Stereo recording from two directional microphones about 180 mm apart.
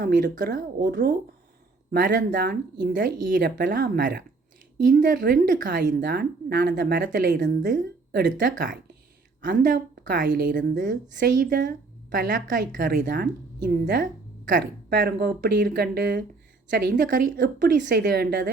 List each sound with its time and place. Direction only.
0.0 s a woman's voice: 55° right (ahead or behind)
1.9 s a woman's voice: 65° right (ahead or behind)